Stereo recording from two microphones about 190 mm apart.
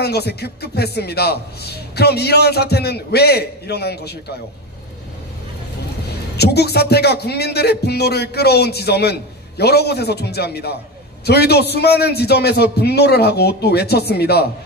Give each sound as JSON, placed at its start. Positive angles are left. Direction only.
{"t": 0.0, "sound": "speech", "side_deg": 60}
{"t": 6.3, "sound": "speech", "side_deg": 60}